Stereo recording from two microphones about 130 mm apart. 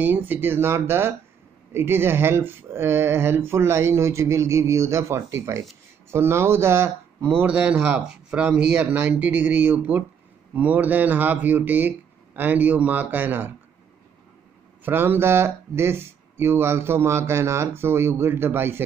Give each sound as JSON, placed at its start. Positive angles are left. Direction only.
{"t": 0.0, "sound": "speech", "side_deg": -15}
{"t": 14.9, "sound": "speech", "side_deg": -15}